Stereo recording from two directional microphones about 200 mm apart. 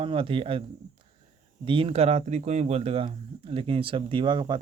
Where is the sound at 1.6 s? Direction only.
25° right (ahead or behind).